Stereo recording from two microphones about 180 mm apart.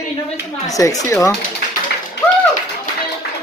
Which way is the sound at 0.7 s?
20° left (ahead or behind).